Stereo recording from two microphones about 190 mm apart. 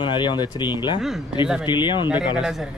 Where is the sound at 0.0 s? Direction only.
25° left (ahead or behind).